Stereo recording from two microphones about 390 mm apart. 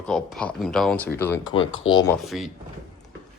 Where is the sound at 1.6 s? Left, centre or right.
Left.